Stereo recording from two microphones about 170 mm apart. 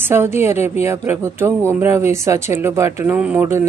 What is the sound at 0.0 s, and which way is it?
Speech, 15° right (ahead or behind).